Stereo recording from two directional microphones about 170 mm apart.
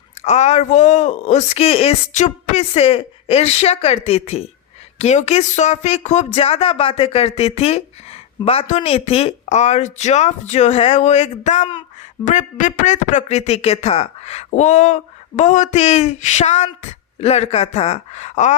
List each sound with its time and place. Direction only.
0.2 s speech: 40° left (ahead or behind)